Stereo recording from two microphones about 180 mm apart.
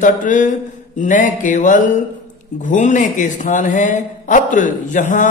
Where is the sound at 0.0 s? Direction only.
45° left (ahead or behind).